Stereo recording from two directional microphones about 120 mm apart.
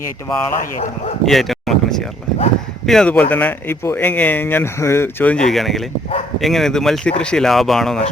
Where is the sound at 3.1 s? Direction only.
15° left (ahead or behind).